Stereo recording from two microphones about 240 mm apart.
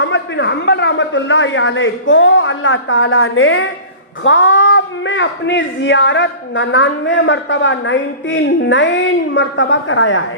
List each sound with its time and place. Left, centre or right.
0.0 s speech: left